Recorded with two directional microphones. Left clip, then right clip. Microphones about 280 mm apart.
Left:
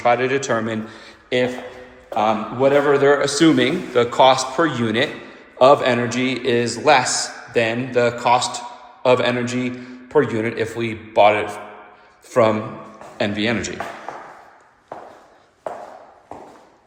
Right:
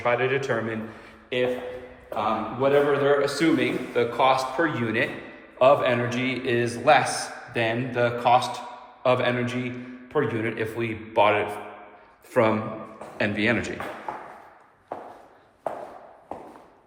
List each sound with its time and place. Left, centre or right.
0.0 s a man's voice: centre